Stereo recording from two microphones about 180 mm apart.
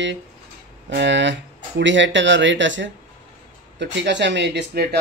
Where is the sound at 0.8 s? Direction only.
80° right.